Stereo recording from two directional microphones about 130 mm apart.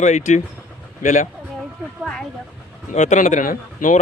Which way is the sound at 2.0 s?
5° left (ahead or behind).